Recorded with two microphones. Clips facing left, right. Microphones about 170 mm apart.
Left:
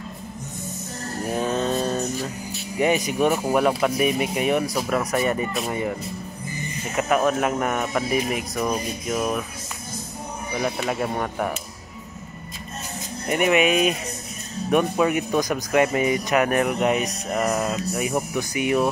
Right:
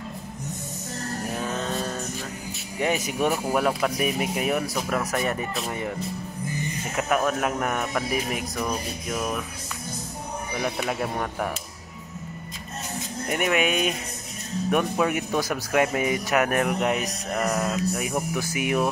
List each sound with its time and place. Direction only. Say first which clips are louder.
1.5 s music: left 6 dB; 25° left (ahead or behind)
3.0 s speech: left 3 dB; centre (ahead or behind)
7.0 s speech: left 3 dB; centre (ahead or behind)
10.6 s speech: left 3 dB; centre (ahead or behind)
13.3 s speech: left 5 dB; 5° left (ahead or behind)